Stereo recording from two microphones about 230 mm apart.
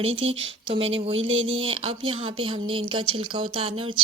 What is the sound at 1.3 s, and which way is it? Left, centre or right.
Speech, right.